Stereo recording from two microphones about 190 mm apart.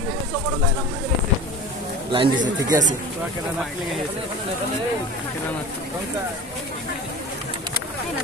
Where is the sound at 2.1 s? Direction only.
25° right (ahead or behind).